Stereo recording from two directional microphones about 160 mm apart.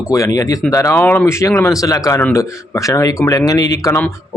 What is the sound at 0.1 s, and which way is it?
Speech, 20° left (ahead or behind).